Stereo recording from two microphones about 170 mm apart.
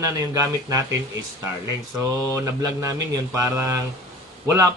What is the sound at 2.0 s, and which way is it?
Speech, 20° right (ahead or behind).